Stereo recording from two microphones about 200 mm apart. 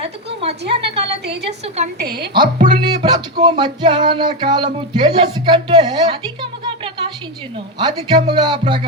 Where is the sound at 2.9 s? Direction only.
25° right (ahead or behind).